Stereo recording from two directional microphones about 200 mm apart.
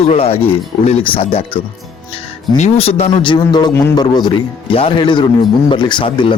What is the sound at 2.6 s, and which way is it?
A man's voice, 30° left (ahead or behind).